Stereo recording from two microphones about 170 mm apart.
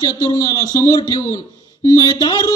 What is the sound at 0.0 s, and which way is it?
Speech, 20° left (ahead or behind).